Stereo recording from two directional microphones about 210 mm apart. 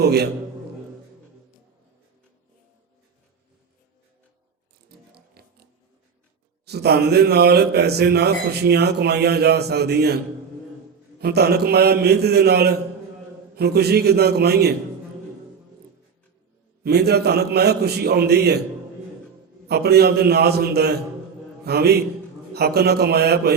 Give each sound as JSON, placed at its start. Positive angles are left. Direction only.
{"t": 0.0, "sound": "a man's voice", "side_deg": -50}
{"t": 4.9, "sound": "music", "side_deg": -50}
{"t": 6.7, "sound": "a man's voice", "side_deg": -50}
{"t": 11.2, "sound": "a man's voice", "side_deg": -50}
{"t": 16.8, "sound": "a man's voice", "side_deg": -50}
{"t": 19.6, "sound": "a man's voice", "side_deg": -50}